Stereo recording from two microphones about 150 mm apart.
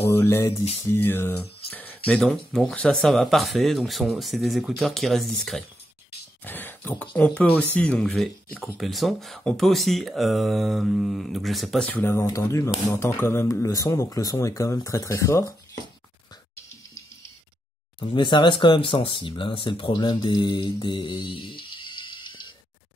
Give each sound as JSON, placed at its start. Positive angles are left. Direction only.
{"t": 0.0, "sound": "speech", "side_deg": 15}
{"t": 6.4, "sound": "a sound", "side_deg": 15}
{"t": 7.2, "sound": "speech", "side_deg": 10}
{"t": 11.9, "sound": "speech", "side_deg": 15}
{"t": 17.9, "sound": "speech", "side_deg": 35}